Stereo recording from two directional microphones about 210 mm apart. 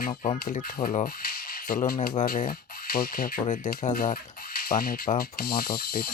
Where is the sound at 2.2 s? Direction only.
40° left (ahead or behind).